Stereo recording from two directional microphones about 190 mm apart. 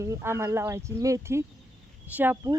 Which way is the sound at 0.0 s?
15° right (ahead or behind).